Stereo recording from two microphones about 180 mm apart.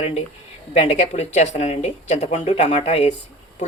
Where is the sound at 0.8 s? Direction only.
35° left (ahead or behind).